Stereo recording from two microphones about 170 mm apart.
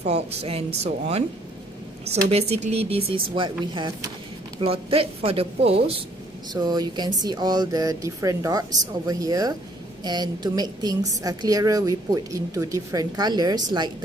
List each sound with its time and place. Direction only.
0.0 s speech: 40° right (ahead or behind)
6.5 s speech: 25° right (ahead or behind)